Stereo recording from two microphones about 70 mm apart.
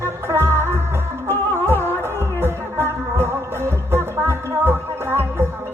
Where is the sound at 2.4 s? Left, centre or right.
Right.